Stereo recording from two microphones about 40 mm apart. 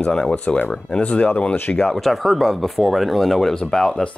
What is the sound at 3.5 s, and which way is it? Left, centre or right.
Speech, centre.